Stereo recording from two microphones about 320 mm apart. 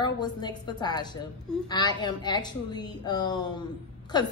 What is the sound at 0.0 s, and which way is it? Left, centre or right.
A woman's voice, centre.